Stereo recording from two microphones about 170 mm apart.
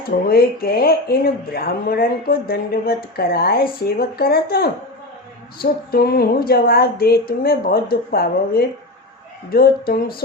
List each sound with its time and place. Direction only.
0.3 s speech: 65° left (ahead or behind)
5.9 s speech: 65° left (ahead or behind)